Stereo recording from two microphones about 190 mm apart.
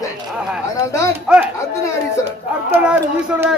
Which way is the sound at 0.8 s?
15° left (ahead or behind).